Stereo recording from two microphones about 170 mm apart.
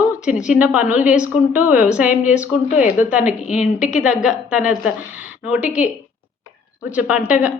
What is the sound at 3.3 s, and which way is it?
Speech, 45° left (ahead or behind).